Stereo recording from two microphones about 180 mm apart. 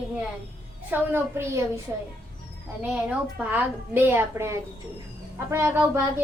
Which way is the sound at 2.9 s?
5° right (ahead or behind).